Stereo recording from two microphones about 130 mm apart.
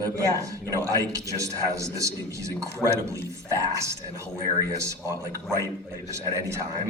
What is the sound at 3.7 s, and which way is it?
Speech, 25° right (ahead or behind).